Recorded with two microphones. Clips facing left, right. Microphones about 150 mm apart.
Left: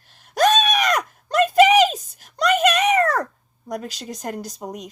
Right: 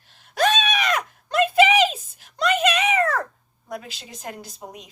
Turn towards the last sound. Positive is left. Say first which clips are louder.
# left 7 dB
turn(degrees=45)  # may be behind; listen again after turning